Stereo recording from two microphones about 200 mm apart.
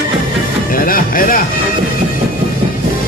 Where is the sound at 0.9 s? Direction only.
45° left (ahead or behind).